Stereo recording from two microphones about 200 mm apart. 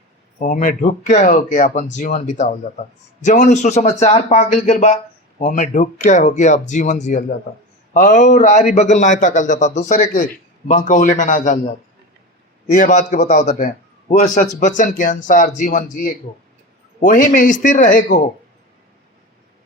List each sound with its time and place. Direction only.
0.3 s speech: 40° left (ahead or behind)
12.7 s speech: 40° left (ahead or behind)